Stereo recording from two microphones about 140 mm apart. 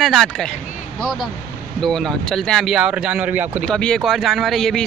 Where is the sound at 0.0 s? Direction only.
Centre (ahead or behind).